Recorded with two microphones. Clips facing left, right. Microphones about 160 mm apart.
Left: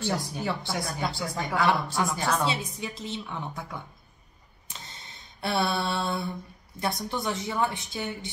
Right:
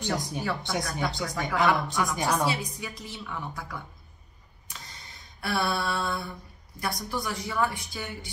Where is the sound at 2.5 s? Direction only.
25° left (ahead or behind).